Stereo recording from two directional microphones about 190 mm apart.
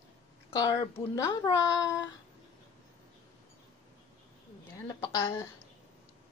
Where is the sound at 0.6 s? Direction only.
20° left (ahead or behind).